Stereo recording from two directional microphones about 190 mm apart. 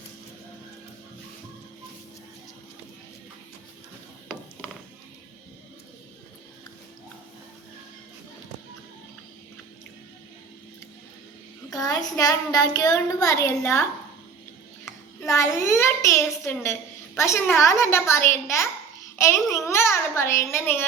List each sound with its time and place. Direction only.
11.7 s child singing: 20° left (ahead or behind)
15.3 s a child's voice: 15° left (ahead or behind)